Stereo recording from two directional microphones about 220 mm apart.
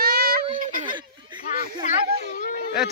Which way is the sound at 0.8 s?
20° right (ahead or behind).